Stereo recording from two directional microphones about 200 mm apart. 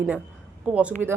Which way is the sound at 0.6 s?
5° right (ahead or behind).